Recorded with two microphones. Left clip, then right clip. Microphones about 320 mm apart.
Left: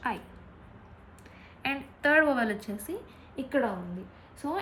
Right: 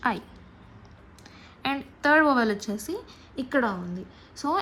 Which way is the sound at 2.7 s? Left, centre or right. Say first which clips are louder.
Right 4 dB; right.